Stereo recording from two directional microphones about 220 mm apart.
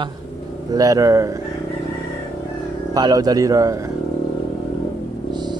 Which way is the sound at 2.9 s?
15° right (ahead or behind).